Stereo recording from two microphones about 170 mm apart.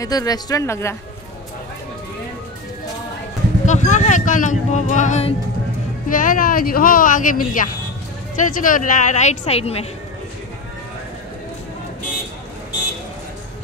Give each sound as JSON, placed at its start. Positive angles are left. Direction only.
{"t": 0.0, "sound": "speech", "side_deg": 20}
{"t": 3.6, "sound": "speech", "side_deg": 45}